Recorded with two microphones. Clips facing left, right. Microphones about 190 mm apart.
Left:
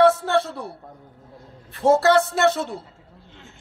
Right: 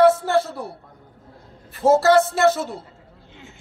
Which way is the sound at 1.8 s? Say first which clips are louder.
Right 2 dB; centre (ahead or behind).